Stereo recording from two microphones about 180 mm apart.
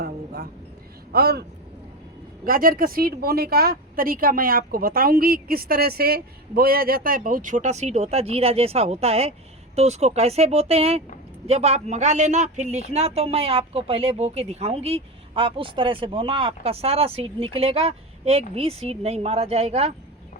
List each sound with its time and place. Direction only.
1.1 s a man's voice: 60° right (ahead or behind); by 19.9 s 35° right (ahead or behind)